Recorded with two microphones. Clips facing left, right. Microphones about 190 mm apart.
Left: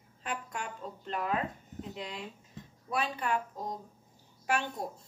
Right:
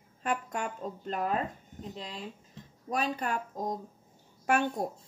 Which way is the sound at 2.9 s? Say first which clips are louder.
Right 1 dB; 40° right (ahead or behind).